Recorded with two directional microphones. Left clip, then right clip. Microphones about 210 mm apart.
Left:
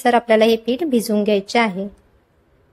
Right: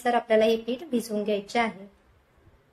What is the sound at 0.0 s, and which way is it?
A woman's voice, 45° left (ahead or behind).